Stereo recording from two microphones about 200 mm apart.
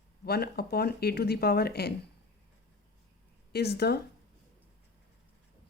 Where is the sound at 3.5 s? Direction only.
55° left (ahead or behind).